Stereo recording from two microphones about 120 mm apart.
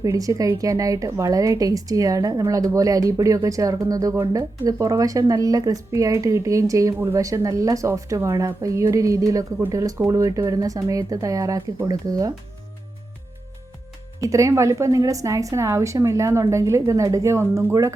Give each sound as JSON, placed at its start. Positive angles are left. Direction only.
{"t": 0.0, "sound": "speech", "side_deg": -30}
{"t": 14.2, "sound": "speech", "side_deg": -25}